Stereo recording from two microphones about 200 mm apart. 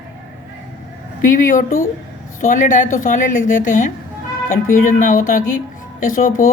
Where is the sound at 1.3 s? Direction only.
40° left (ahead or behind).